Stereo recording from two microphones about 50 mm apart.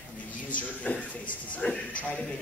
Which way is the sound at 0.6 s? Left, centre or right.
Left.